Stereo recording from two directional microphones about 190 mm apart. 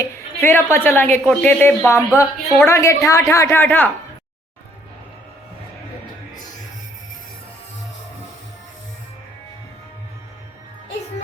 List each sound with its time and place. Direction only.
0.0 s a woman's voice: 15° left (ahead or behind)
2.4 s a woman's voice: centre (ahead or behind)
2.6 s a woman's voice: 15° left (ahead or behind)